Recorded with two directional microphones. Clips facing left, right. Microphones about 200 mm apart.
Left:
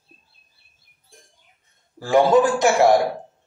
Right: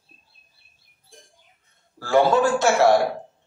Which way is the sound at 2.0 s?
15° left (ahead or behind).